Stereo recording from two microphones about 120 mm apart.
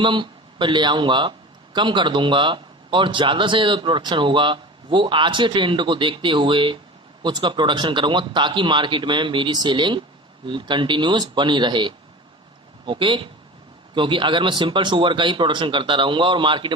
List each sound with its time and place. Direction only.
0.0 s a man's voice: 40° right (ahead or behind)